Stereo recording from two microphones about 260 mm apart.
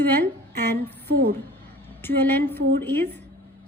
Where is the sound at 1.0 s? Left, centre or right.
Right.